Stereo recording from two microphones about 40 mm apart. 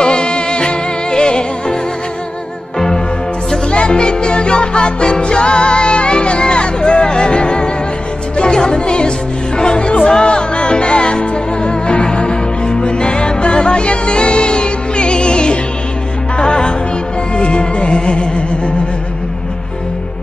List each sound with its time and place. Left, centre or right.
0.0 s music: left
3.7 s music: left